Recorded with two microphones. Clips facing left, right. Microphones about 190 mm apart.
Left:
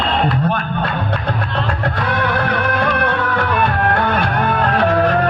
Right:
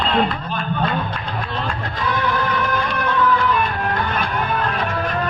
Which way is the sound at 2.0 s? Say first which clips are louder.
Even; 65° left (ahead or behind).